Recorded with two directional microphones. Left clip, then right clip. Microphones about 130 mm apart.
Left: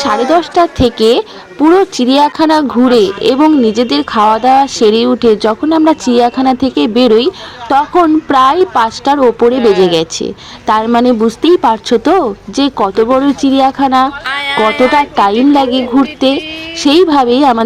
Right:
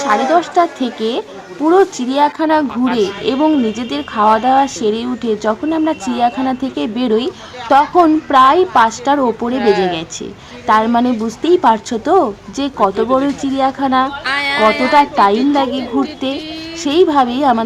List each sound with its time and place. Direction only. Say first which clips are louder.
0.0 s speech: left 3 dB; 30° left (ahead or behind)
9.6 s speech: left 4 dB; 30° right (ahead or behind)
9.8 s speech: left 8 dB; 30° left (ahead or behind)
14.3 s speech: left 1 dB; 20° right (ahead or behind)
14.9 s speech: left 1 dB; 30° left (ahead or behind)